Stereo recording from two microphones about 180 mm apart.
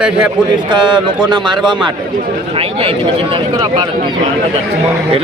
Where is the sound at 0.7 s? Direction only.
25° right (ahead or behind).